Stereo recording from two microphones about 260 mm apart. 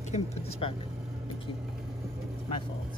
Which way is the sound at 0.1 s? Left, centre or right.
Left.